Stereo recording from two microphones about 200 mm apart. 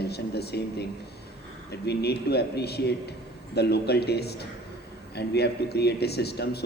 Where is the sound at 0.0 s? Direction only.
55° left (ahead or behind).